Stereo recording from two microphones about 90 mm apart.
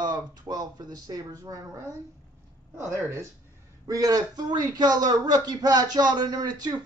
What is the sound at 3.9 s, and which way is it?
A man's voice, 45° right (ahead or behind).